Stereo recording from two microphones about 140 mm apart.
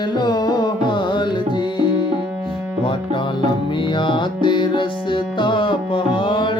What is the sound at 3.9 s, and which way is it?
Music, 35° left (ahead or behind).